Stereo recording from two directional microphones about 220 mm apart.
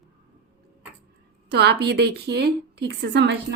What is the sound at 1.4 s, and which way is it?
A woman's voice, 45° right (ahead or behind).